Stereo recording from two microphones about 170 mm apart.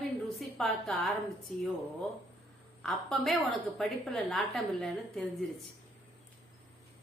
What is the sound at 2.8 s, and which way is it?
A woman's voice, centre (ahead or behind).